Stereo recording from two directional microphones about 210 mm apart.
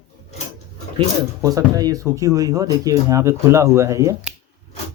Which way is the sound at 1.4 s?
15° right (ahead or behind).